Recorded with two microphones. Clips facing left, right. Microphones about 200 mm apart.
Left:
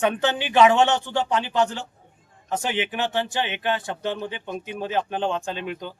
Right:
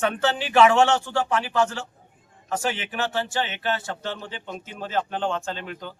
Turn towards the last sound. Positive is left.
turn(degrees=15)  # may be behind; listen again after turning